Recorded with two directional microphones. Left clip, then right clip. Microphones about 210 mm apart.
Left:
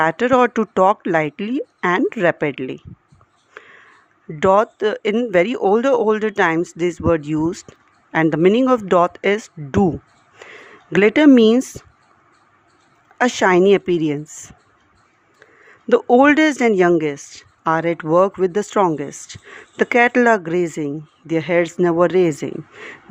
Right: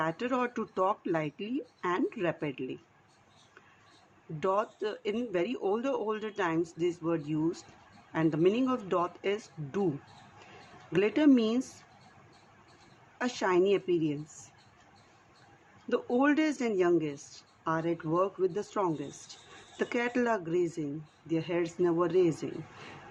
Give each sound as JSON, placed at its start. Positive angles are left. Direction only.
{"t": 0.0, "sound": "speech", "side_deg": 50}
{"t": 3.6, "sound": "a sound", "side_deg": 45}
{"t": 4.4, "sound": "speech", "side_deg": 50}
{"t": 10.9, "sound": "speech", "side_deg": 50}
{"t": 13.1, "sound": "speech", "side_deg": 50}
{"t": 15.9, "sound": "speech", "side_deg": 50}